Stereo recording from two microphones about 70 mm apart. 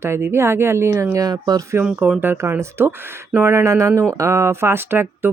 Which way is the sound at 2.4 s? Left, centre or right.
Right.